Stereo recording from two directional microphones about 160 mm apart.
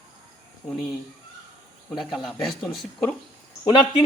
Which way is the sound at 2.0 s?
Centre (ahead or behind).